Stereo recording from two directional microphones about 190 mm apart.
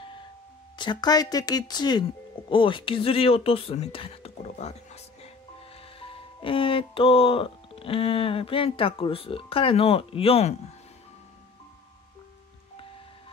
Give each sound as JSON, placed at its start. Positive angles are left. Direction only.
{"t": 0.7, "sound": "speech", "side_deg": 25}